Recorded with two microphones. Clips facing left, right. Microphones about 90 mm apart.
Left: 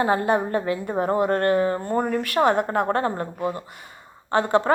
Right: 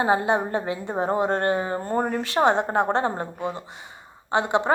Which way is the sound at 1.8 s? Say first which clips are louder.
Left 1 dB; 35° right (ahead or behind).